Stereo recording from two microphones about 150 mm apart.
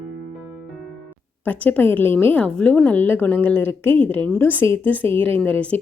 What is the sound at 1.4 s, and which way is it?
A woman's voice, 10° left (ahead or behind).